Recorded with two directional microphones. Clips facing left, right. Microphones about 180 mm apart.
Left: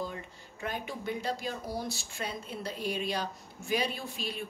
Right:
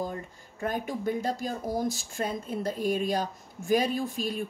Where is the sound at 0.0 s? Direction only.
45° right (ahead or behind).